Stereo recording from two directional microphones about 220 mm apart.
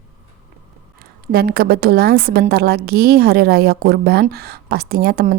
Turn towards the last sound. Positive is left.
turn(degrees=-40)  # may be behind; listen again after turning